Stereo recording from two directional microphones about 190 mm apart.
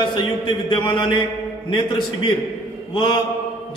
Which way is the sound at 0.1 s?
25° left (ahead or behind).